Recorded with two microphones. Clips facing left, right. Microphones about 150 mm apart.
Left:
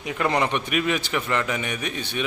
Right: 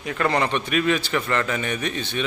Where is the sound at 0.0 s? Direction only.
15° left (ahead or behind).